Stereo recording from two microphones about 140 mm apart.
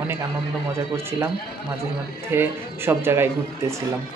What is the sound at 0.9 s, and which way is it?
Speech, 25° right (ahead or behind).